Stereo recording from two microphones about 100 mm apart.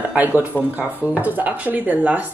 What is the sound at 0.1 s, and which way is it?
Speech, 15° right (ahead or behind).